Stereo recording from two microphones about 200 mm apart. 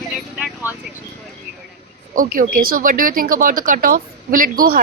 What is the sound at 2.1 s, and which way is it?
Speech, 40° right (ahead or behind).